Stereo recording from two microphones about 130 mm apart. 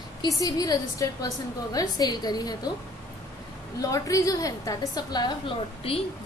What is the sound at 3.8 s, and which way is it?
A woman's voice, 25° left (ahead or behind).